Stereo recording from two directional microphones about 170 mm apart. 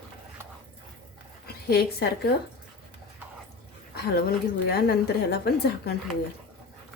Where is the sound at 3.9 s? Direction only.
70° left (ahead or behind).